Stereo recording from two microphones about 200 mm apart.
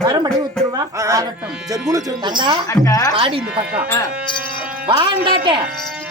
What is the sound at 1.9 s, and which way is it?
Speech, 20° right (ahead or behind).